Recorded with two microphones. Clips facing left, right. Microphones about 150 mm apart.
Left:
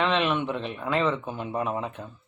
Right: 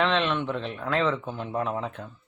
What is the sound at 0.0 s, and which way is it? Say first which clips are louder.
Speech: even; 5° left (ahead or behind).